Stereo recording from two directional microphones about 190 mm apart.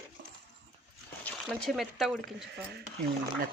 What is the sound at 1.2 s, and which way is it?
Speech, 5° left (ahead or behind).